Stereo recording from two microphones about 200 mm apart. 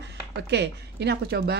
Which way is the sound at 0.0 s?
60° right (ahead or behind).